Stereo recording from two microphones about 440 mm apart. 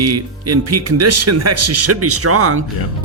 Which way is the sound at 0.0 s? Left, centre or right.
Right.